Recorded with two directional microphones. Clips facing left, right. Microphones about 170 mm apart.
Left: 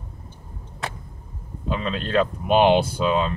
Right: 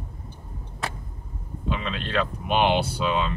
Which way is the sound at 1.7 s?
40° left (ahead or behind).